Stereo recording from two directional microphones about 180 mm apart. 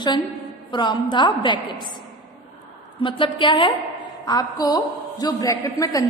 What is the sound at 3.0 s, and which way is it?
A woman's voice, 30° left (ahead or behind).